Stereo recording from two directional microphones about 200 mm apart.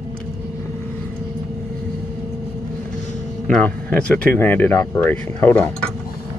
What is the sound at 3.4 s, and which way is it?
Speech, 5° left (ahead or behind).